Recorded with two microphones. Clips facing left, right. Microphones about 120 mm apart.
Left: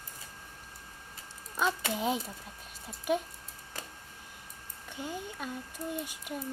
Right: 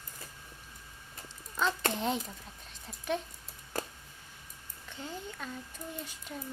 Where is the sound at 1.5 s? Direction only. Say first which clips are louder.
Left 1 dB; 10° left (ahead or behind).